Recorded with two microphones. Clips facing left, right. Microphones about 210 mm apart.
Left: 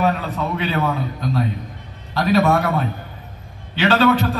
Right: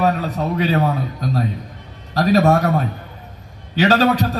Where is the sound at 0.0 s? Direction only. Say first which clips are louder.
Right 2 dB; 40° right (ahead or behind).